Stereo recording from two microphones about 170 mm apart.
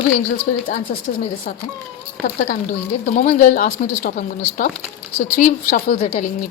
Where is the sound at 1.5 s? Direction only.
50° left (ahead or behind).